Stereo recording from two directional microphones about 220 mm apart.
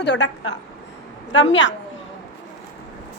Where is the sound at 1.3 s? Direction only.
55° left (ahead or behind).